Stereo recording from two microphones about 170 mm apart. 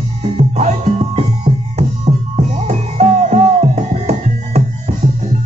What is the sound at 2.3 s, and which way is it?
Music, 40° right (ahead or behind).